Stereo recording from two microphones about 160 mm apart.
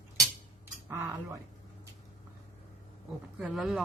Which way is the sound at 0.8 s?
15° right (ahead or behind).